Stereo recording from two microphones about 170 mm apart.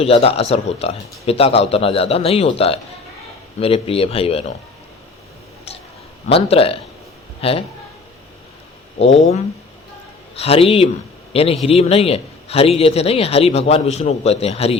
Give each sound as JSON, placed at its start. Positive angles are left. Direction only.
{"t": 0.0, "sound": "a man's voice", "side_deg": 35}
{"t": 6.2, "sound": "a man's voice", "side_deg": 35}
{"t": 10.3, "sound": "a man's voice", "side_deg": 35}